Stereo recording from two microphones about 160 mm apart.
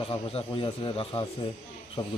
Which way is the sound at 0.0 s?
35° left (ahead or behind).